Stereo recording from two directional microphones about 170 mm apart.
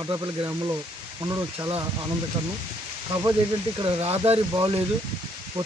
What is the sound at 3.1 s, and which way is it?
Speech, 25° right (ahead or behind).